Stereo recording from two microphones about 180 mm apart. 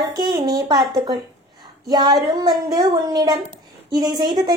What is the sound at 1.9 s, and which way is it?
A woman's voice, 25° right (ahead or behind).